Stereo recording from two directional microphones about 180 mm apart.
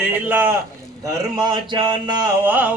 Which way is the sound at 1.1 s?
20° right (ahead or behind).